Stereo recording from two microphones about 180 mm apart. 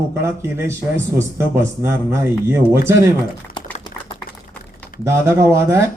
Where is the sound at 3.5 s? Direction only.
25° left (ahead or behind).